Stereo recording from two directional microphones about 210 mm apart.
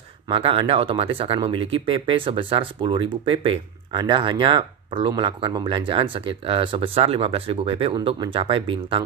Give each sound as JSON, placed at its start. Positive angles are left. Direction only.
{"t": 0.3, "sound": "speech", "side_deg": -25}